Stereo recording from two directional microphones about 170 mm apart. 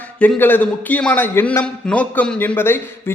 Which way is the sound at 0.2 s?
10° left (ahead or behind).